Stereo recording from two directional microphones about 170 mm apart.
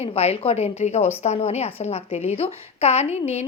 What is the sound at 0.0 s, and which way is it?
Speech, 35° left (ahead or behind).